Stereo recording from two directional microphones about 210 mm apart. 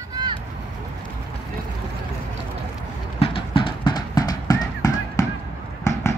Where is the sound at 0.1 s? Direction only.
20° right (ahead or behind).